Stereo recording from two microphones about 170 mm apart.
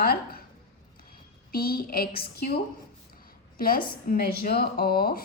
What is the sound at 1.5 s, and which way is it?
A woman's voice, 60° left (ahead or behind).